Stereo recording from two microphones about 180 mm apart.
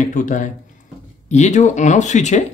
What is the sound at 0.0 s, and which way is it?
A man's voice, 45° left (ahead or behind).